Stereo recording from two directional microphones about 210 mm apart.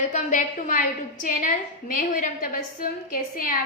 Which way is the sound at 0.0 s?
35° left (ahead or behind).